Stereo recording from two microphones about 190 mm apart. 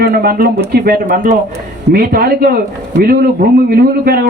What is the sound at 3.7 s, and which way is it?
Speech, 50° right (ahead or behind).